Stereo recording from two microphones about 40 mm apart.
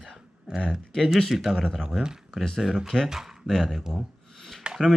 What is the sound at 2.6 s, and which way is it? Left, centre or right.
Speech, centre.